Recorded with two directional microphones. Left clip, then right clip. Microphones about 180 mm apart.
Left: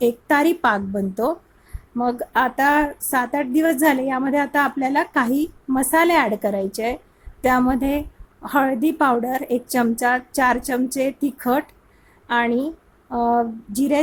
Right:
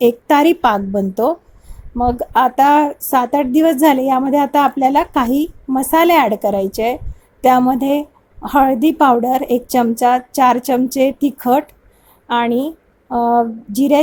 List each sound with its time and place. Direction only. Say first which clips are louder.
0.0 s a woman's voice: right 6 dB; 25° right (ahead or behind)